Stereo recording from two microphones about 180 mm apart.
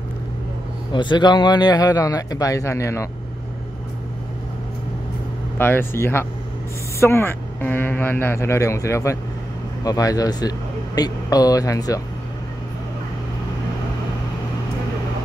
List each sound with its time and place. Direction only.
0.9 s a man's voice: 25° left (ahead or behind)
5.6 s a man's voice: 10° left (ahead or behind)